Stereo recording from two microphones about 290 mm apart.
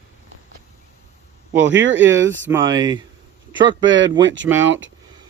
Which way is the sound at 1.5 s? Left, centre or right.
Right.